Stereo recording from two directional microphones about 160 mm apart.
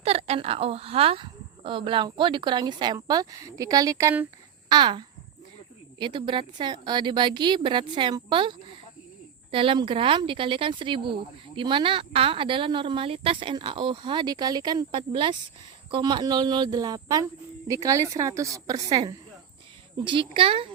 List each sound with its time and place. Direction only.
0.0 s a woman's voice: 40° right (ahead or behind); by 4.3 s 15° right (ahead or behind)
4.7 s a woman's voice: 30° right (ahead or behind)